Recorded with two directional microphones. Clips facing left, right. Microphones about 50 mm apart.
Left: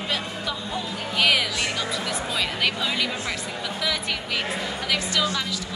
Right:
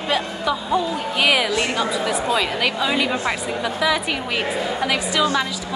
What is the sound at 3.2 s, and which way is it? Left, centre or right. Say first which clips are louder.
Speech: right 7 dB; centre.